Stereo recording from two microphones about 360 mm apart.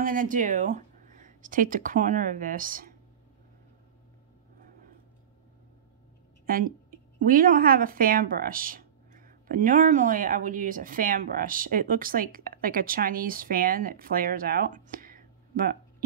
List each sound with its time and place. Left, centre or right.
0.0 s speech: right
6.4 s a woman's voice: right